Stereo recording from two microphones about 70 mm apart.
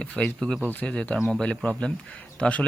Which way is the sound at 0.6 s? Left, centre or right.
Left.